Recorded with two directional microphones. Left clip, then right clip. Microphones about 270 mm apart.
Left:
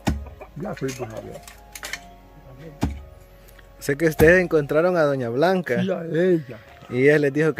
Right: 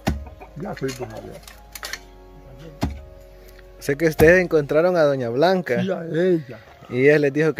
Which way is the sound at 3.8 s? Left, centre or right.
Centre.